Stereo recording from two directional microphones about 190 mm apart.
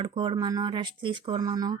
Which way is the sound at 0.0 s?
25° right (ahead or behind).